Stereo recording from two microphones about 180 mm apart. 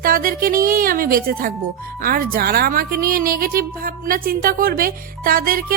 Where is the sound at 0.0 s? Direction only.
50° right (ahead or behind).